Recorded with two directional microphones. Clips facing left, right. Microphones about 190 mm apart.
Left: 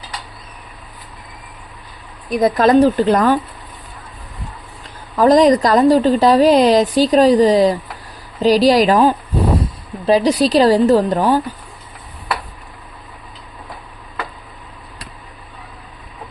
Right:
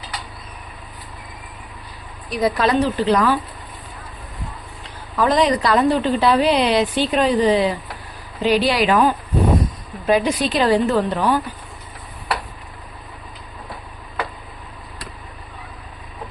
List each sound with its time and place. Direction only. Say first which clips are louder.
2.3 s a woman's voice: left 6 dB; 45° left (ahead or behind)
5.1 s a woman's voice: left 7 dB; 40° left (ahead or behind)